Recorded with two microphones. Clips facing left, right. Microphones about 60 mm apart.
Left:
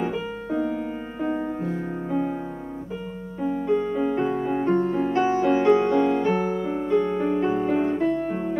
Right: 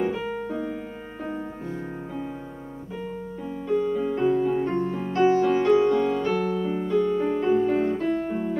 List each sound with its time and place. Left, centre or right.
0.0 s music: centre
2.0 s music: centre
3.7 s piano: left
4.9 s music: centre